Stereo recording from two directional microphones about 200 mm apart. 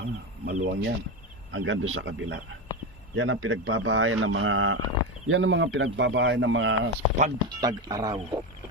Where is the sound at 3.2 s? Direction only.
90° right; by 6.7 s 65° right (ahead or behind).